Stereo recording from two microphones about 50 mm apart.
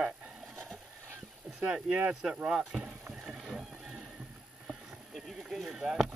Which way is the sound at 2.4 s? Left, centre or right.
Centre.